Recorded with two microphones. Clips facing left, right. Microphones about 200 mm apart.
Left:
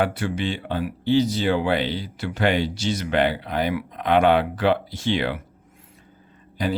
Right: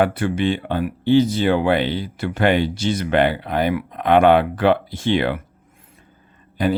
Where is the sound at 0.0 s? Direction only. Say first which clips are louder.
Right 5 dB; 55° right (ahead or behind).